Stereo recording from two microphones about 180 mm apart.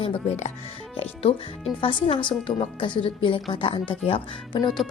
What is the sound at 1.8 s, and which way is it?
A woman's voice, 30° left (ahead or behind).